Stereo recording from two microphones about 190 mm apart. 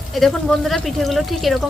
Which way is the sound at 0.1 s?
Centre (ahead or behind).